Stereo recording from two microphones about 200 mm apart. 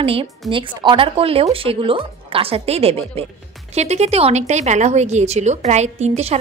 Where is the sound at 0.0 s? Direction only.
25° right (ahead or behind).